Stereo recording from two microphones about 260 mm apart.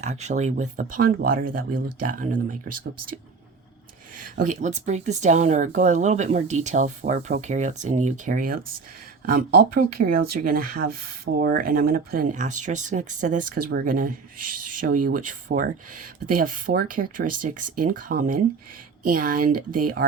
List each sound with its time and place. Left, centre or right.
0.0 s speech: right
4.1 s speech: right